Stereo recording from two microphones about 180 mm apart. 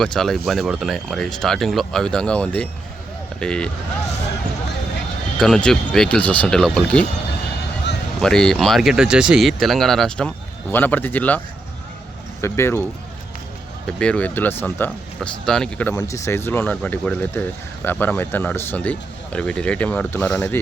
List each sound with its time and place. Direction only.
0.0 s speech: centre (ahead or behind)
5.4 s speech: 5° left (ahead or behind)
8.2 s speech: 5° left (ahead or behind)